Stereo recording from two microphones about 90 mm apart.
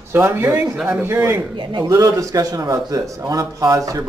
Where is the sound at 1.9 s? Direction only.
35° right (ahead or behind).